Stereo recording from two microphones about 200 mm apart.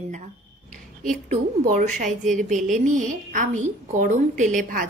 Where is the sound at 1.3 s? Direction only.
45° right (ahead or behind).